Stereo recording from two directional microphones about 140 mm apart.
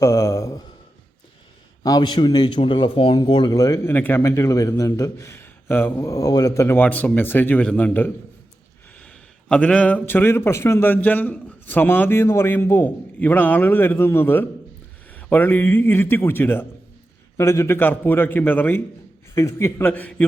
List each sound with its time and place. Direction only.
0.0 s a man's voice: 20° left (ahead or behind)
1.8 s a man's voice: 30° left (ahead or behind); by 20.2 s 10° left (ahead or behind)